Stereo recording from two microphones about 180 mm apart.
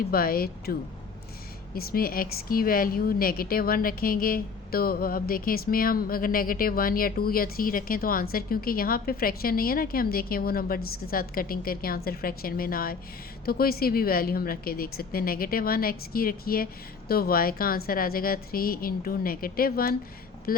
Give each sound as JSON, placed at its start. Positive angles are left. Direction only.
{"t": 0.1, "sound": "a woman's voice", "side_deg": 55}